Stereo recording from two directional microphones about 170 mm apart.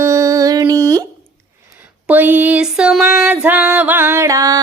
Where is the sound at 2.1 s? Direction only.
10° right (ahead or behind).